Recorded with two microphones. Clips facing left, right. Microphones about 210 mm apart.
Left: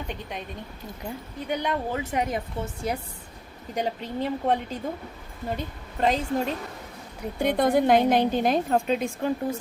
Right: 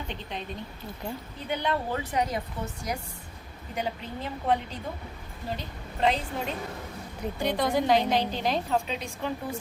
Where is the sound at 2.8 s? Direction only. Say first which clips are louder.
Left 5 dB; 30° left (ahead or behind).